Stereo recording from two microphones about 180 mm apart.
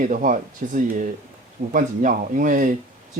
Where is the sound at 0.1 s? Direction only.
45° right (ahead or behind).